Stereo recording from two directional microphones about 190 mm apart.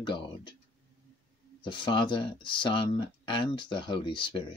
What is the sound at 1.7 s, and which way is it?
Speech, 25° left (ahead or behind).